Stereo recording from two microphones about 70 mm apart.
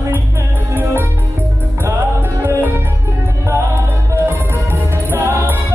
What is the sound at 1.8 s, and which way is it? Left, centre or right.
Music, right.